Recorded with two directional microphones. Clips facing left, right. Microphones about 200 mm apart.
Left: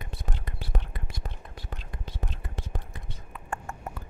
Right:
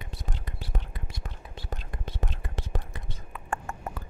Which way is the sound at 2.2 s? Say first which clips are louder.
Right 2 dB; 90° right.